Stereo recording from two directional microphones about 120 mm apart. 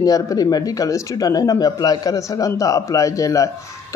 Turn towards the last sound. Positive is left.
turn(degrees=30)  # may be behind; listen again after turning